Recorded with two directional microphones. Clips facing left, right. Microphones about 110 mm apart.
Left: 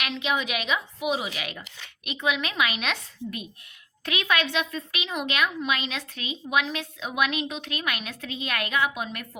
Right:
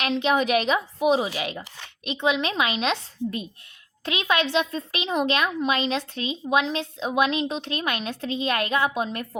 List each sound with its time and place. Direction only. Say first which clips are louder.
0.0 s a woman's voice: right 6 dB; 35° right (ahead or behind)